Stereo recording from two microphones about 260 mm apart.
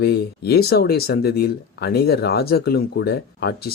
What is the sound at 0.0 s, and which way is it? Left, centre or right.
Speech, left.